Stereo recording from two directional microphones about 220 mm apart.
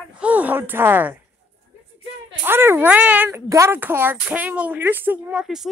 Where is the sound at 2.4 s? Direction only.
10° right (ahead or behind).